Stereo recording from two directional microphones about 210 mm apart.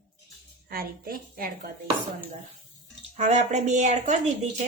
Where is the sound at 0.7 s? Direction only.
45° right (ahead or behind).